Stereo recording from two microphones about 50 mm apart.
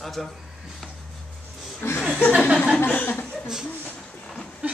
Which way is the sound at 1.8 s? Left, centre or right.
Left.